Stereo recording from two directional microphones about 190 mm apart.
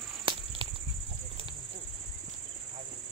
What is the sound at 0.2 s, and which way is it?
Snake, 25° right (ahead or behind).